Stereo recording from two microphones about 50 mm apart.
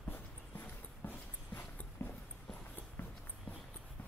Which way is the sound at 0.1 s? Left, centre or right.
Left.